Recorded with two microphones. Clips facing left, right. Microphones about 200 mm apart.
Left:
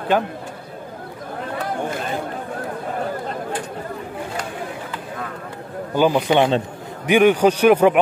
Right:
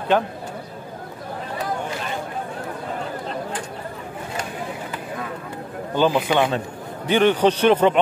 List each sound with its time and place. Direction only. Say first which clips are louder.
0.1 s speech: even; 5° left (ahead or behind)
5.9 s a man's voice: left 2 dB; 15° left (ahead or behind)